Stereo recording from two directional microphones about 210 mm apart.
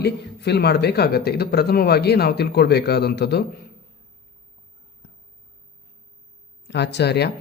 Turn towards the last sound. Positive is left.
turn(degrees=50)  # may be behind; listen again after turning